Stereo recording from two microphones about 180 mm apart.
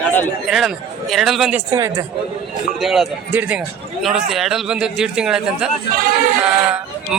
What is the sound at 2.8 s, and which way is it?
A man's voice, centre (ahead or behind).